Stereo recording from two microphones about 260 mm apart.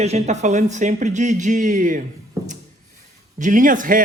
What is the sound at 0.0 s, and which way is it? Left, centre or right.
Speech, right.